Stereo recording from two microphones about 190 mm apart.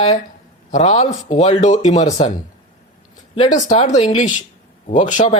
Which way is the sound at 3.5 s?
40° left (ahead or behind).